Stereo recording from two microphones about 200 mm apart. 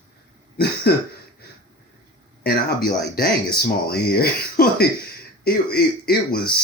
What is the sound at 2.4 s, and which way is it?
Speech, 50° left (ahead or behind).